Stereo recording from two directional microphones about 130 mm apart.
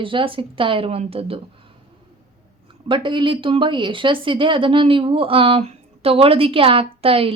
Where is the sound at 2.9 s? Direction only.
40° right (ahead or behind).